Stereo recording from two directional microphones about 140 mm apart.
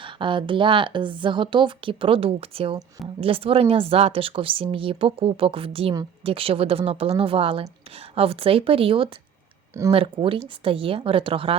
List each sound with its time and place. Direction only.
0.0 s a woman's voice: 35° right (ahead or behind)